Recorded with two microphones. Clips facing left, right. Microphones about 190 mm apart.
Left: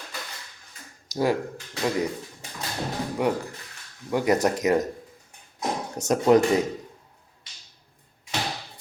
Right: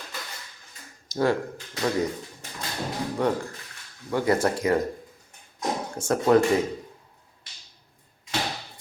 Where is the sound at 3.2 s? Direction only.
10° left (ahead or behind).